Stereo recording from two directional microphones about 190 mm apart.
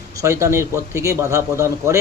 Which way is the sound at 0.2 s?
15° right (ahead or behind).